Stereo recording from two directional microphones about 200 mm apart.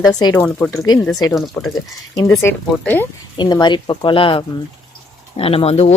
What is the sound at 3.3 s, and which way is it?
Speech, 20° left (ahead or behind).